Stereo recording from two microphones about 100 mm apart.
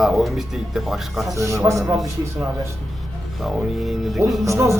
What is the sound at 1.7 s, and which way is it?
Speech, centre (ahead or behind).